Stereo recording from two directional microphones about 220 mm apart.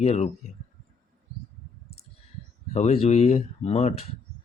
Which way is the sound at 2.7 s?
30° left (ahead or behind).